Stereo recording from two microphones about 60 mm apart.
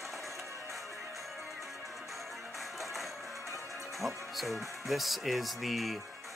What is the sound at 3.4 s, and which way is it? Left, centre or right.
Music, left.